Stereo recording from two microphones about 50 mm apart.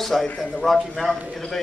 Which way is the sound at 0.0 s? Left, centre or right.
Centre.